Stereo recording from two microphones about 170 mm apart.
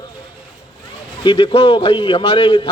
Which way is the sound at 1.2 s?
30° left (ahead or behind).